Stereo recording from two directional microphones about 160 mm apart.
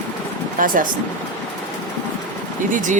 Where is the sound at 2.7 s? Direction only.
55° right (ahead or behind).